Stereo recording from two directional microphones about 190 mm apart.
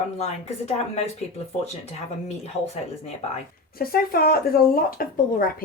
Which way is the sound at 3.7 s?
50° left (ahead or behind).